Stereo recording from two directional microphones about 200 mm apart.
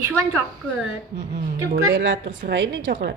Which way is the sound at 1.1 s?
55° right (ahead or behind).